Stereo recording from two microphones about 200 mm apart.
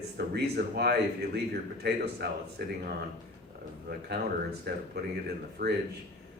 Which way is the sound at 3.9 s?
55° right (ahead or behind).